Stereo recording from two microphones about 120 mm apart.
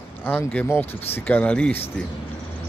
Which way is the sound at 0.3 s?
15° left (ahead or behind).